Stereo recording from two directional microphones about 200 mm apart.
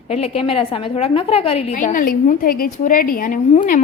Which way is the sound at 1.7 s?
40° left (ahead or behind).